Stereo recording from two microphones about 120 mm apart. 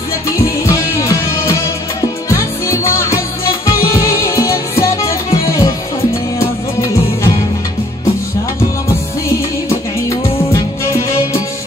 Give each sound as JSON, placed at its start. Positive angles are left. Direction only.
{"t": 0.4, "sound": "music", "side_deg": 25}
{"t": 10.5, "sound": "music", "side_deg": 25}